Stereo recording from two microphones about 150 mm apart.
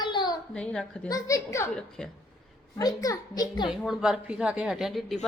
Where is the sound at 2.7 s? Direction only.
25° left (ahead or behind).